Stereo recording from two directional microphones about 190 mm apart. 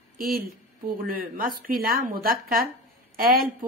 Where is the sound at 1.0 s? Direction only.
50° right (ahead or behind).